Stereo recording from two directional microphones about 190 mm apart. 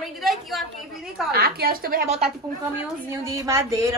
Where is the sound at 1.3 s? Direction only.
55° right (ahead or behind).